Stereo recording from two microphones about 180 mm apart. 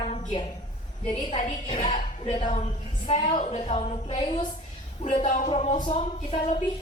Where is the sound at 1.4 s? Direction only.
40° left (ahead or behind).